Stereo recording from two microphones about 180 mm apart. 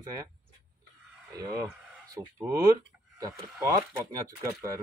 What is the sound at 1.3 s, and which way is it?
Speech, 20° right (ahead or behind).